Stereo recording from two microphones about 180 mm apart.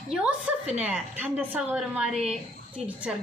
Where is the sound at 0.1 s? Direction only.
5° right (ahead or behind).